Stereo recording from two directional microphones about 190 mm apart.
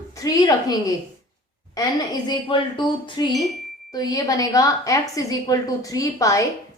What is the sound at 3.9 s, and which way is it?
A woman's voice, 20° left (ahead or behind).